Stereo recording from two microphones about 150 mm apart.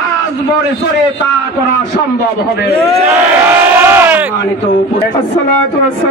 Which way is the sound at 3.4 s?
15° right (ahead or behind).